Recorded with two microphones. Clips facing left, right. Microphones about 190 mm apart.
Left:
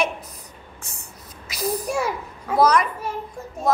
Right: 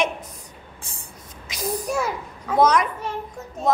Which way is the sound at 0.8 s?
30° right (ahead or behind).